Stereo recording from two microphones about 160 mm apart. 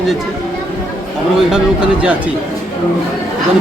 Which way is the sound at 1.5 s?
5° right (ahead or behind).